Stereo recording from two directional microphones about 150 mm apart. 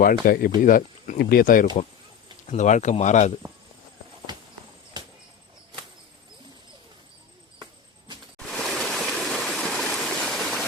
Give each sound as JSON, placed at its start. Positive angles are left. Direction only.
{"t": 0.0, "sound": "speech", "side_deg": 75}
{"t": 0.6, "sound": "speech", "side_deg": 65}
{"t": 2.5, "sound": "speech", "side_deg": 55}
{"t": 7.6, "sound": "a sound", "side_deg": -30}
{"t": 8.4, "sound": "stream", "side_deg": 0}